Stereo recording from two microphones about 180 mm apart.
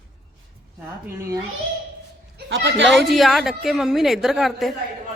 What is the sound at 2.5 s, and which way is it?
Speech, 80° right.